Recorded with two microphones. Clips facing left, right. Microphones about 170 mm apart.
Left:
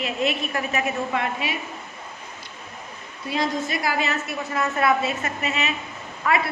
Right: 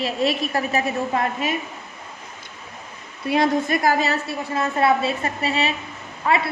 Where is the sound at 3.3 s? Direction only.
55° right (ahead or behind).